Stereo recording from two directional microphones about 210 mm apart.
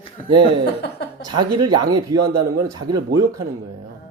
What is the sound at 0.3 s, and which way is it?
A man's voice, 25° right (ahead or behind).